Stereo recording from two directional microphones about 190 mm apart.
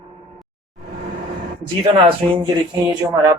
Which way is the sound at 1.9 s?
30° right (ahead or behind).